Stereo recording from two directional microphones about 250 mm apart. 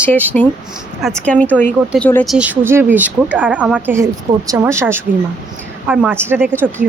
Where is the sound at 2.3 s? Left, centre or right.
Centre.